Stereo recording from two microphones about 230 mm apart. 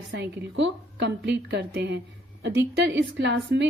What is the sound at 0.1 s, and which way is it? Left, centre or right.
A woman's voice, right.